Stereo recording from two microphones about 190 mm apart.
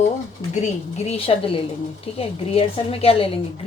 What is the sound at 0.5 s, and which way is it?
A woman's voice, 35° left (ahead or behind).